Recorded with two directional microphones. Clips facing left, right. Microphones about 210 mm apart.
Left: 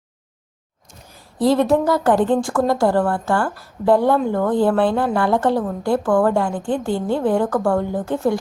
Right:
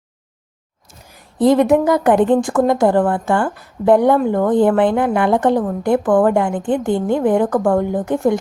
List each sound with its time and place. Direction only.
0.9 s a woman's voice: 15° right (ahead or behind)